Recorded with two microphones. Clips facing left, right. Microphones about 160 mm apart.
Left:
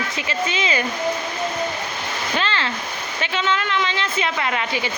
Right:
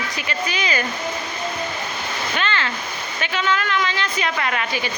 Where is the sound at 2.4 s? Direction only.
30° left (ahead or behind).